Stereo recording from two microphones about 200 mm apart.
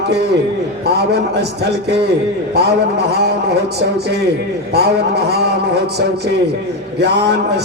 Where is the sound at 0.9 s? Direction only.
55° right (ahead or behind).